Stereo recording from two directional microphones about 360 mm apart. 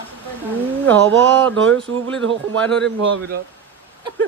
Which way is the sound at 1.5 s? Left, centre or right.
Right.